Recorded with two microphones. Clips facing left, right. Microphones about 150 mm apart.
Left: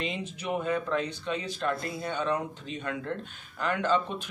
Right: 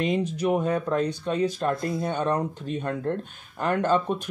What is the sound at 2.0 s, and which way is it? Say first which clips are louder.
Speech: right 3 dB; 50° right (ahead or behind).